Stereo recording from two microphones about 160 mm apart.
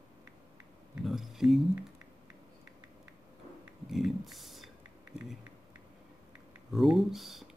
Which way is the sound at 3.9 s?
Centre (ahead or behind).